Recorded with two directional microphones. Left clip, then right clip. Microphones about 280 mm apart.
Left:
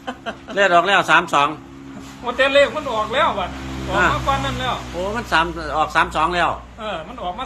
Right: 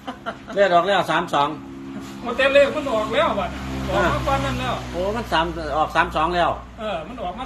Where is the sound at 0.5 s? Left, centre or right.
Centre.